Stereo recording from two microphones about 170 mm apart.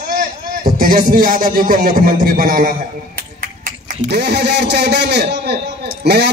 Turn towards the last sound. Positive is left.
turn(degrees=-80)